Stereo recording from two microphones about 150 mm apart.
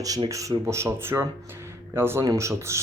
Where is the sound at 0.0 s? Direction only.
25° right (ahead or behind).